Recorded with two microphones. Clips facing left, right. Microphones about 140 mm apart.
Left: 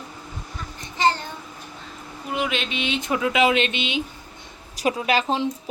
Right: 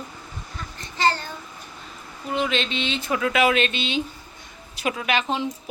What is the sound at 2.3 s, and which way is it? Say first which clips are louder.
Speech: right 2 dB; 10° left (ahead or behind).